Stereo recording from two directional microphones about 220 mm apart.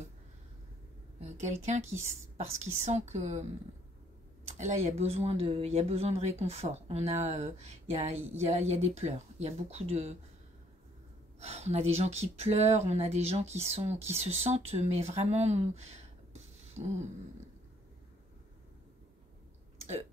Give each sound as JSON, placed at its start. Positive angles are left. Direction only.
{"t": 1.2, "sound": "a woman's voice", "side_deg": -30}
{"t": 4.5, "sound": "speech", "side_deg": -30}
{"t": 11.3, "sound": "speech", "side_deg": -30}
{"t": 16.6, "sound": "a sound", "side_deg": -30}